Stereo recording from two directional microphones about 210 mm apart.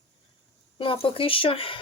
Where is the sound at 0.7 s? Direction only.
25° left (ahead or behind).